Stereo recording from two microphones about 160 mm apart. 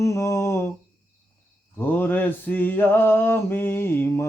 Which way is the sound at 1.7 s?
10° left (ahead or behind).